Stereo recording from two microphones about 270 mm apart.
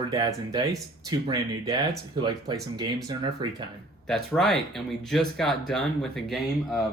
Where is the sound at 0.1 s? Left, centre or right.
Centre.